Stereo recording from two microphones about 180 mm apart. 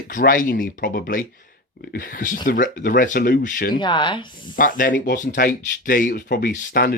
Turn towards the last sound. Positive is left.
turn(degrees=60)  # may be behind; listen again after turning